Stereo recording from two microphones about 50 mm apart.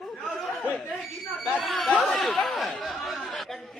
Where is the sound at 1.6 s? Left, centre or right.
Centre.